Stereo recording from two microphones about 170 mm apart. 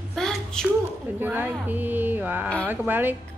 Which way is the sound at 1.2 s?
10° right (ahead or behind).